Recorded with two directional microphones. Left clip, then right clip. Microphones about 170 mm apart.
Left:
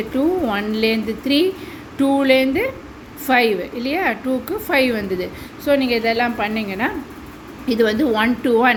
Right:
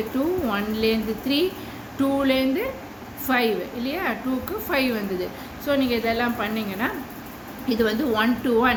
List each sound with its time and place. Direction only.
0.4 s a woman's voice: 35° left (ahead or behind)